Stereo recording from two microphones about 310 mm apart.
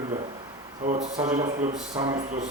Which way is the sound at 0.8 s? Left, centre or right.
Right.